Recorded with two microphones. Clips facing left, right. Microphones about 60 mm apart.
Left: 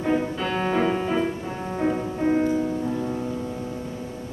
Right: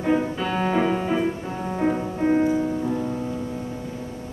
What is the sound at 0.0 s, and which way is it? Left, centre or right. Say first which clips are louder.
Music: right 1 dB; centre.